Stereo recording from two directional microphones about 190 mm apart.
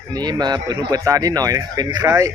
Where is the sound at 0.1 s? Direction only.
20° right (ahead or behind).